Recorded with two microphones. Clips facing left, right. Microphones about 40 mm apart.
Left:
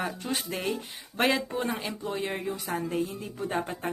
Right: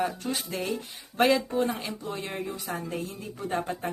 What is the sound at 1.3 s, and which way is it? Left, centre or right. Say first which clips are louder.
Speech: right 4 dB; left.